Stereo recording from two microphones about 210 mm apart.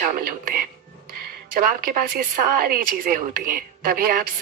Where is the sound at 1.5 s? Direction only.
40° right (ahead or behind).